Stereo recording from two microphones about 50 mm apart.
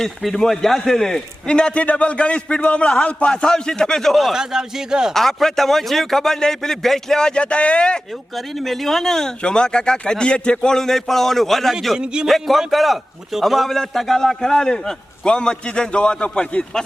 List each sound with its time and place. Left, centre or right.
0.0 s a man's voice: centre
1.5 s a man's voice: centre
4.2 s speech: centre
5.1 s a man's voice: centre
8.4 s a man's voice: centre
11.9 s speech: centre
12.3 s a man's voice: centre; by 16.6 s left